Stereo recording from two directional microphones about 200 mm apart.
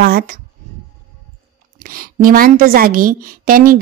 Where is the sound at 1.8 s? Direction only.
45° right (ahead or behind).